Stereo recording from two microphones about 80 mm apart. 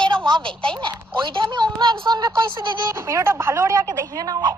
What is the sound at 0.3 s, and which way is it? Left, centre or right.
A woman's voice, right.